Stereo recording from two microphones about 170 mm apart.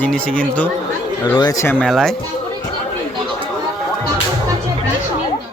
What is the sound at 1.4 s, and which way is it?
Speech, 20° left (ahead or behind).